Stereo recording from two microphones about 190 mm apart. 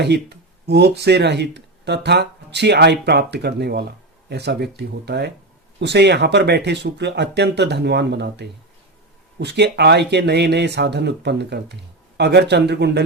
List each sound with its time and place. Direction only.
0.0 s speech: 60° right (ahead or behind)